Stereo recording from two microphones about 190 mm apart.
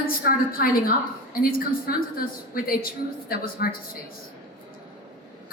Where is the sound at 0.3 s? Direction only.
50° left (ahead or behind).